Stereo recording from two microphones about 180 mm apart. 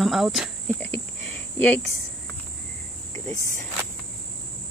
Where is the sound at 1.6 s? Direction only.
10° left (ahead or behind).